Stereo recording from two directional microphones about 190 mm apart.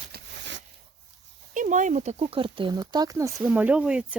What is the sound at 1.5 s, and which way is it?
Speech, 40° right (ahead or behind).